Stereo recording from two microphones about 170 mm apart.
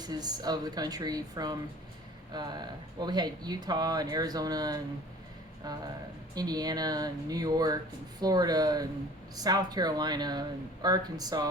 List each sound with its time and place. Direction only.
0.0 s speech: 25° right (ahead or behind)